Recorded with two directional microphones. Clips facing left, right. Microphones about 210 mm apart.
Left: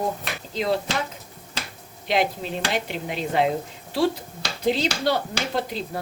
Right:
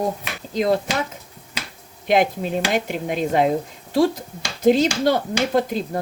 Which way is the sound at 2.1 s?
50° right (ahead or behind).